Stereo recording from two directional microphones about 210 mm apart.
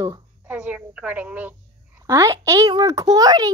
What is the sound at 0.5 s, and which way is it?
A woman's voice, 5° right (ahead or behind).